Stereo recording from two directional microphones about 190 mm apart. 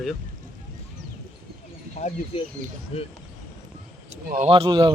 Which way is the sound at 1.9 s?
35° left (ahead or behind).